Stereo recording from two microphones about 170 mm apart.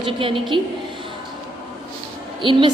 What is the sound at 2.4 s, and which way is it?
Speech, 30° right (ahead or behind).